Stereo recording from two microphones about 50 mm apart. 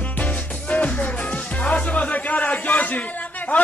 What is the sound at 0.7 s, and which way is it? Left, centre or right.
Speech, left.